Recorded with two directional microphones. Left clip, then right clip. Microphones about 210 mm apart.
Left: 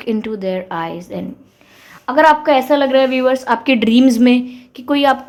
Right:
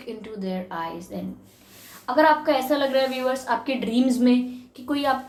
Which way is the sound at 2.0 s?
45° left (ahead or behind).